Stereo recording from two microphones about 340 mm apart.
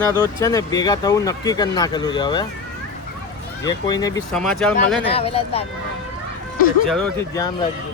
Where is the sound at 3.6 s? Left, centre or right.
Centre.